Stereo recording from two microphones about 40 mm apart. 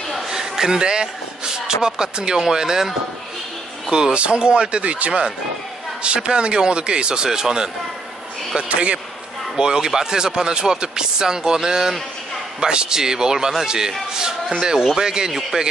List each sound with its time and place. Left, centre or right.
0.3 s speech: centre
3.9 s speech: right
8.5 s speech: right
9.6 s speech: centre